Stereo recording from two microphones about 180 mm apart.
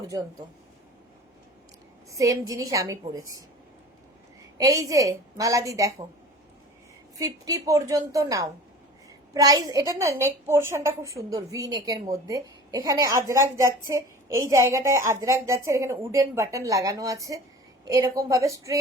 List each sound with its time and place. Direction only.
2.0 s a woman's voice: 20° right (ahead or behind)
4.5 s a woman's voice: 20° right (ahead or behind)
7.2 s a woman's voice: 20° right (ahead or behind)